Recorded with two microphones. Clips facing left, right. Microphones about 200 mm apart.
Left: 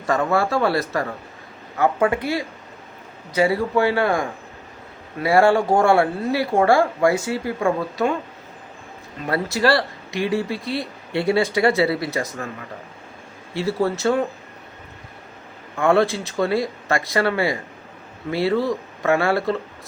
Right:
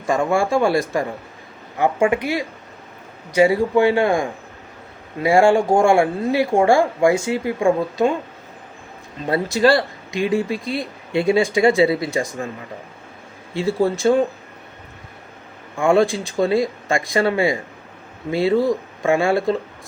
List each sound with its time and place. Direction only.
0.0 s speech: 15° right (ahead or behind)
9.2 s speech: 20° right (ahead or behind)
13.5 s speech: 20° right (ahead or behind)
15.7 s speech: 15° right (ahead or behind)